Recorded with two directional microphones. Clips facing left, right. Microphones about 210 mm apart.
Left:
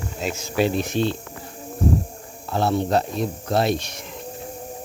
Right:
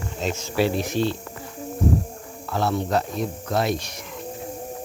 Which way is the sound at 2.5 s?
30° left (ahead or behind).